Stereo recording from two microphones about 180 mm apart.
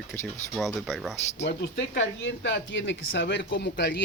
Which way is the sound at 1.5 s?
80° left.